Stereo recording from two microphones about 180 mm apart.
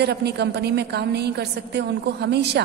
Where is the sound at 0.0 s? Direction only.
65° right (ahead or behind).